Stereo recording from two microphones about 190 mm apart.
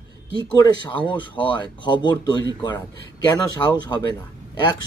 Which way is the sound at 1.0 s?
25° left (ahead or behind).